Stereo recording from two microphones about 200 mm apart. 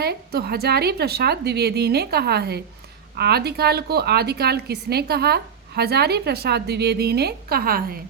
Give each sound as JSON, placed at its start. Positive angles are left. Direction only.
{"t": 0.0, "sound": "a woman's voice", "side_deg": -50}